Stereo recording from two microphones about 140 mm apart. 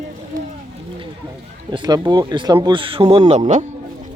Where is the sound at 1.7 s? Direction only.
30° right (ahead or behind); by 3.7 s 55° right (ahead or behind).